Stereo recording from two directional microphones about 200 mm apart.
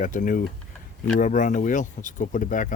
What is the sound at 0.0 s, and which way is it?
Speech, 40° left (ahead or behind).